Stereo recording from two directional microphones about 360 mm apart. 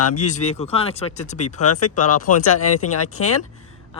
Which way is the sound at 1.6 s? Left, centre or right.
Left.